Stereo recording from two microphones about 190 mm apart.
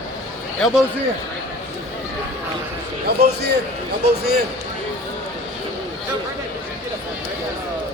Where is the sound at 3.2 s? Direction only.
60° right (ahead or behind).